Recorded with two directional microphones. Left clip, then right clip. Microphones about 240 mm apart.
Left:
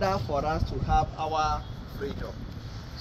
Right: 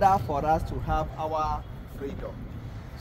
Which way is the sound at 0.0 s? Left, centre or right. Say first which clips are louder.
Right 5 dB; right.